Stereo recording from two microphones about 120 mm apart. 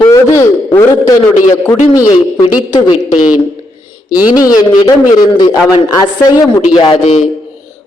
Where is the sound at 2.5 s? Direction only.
35° left (ahead or behind).